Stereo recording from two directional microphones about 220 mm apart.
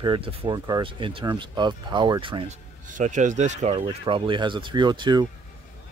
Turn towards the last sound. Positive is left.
turn(degrees=-20)  # may be behind; listen again after turning